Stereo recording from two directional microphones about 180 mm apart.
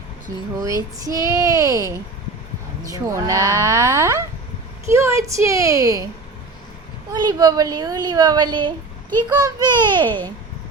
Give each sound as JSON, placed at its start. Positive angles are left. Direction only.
{"t": 1.0, "sound": "speech", "side_deg": -20}
{"t": 7.1, "sound": "speech", "side_deg": -20}